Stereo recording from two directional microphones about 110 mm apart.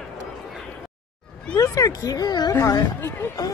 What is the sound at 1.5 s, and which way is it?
Speech, 30° left (ahead or behind).